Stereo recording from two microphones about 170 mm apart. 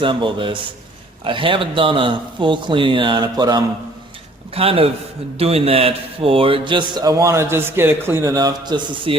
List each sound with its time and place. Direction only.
0.0 s a man's voice: 30° right (ahead or behind)